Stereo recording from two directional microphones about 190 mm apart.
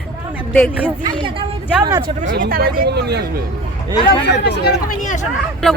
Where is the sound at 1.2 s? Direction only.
25° right (ahead or behind).